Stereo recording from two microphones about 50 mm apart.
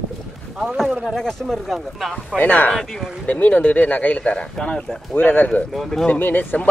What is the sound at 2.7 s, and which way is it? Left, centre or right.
Speech, centre.